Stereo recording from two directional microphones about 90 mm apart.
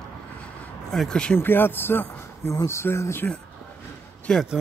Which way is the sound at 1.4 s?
25° left (ahead or behind).